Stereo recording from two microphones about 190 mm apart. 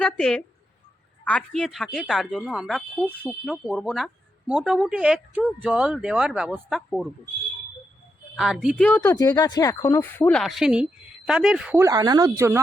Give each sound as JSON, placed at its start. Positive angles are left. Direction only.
{"t": 0.0, "sound": "speech", "side_deg": 5}
{"t": 8.4, "sound": "speech", "side_deg": 0}
{"t": 8.9, "sound": "speech", "side_deg": 15}
{"t": 11.8, "sound": "speech", "side_deg": -20}